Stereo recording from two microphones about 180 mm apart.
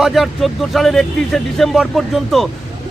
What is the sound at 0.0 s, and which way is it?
A man's voice, centre (ahead or behind).